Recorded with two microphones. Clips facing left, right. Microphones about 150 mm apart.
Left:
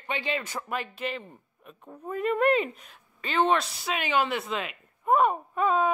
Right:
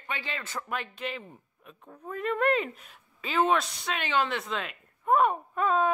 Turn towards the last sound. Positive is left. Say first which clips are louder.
# left 1 dB
turn(degrees=5)  # may be behind; listen again after turning